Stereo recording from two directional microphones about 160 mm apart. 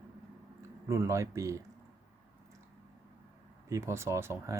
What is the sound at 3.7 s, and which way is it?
Speech, 20° right (ahead or behind).